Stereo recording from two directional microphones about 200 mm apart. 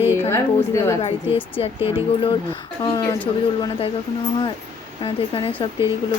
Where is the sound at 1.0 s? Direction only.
30° left (ahead or behind).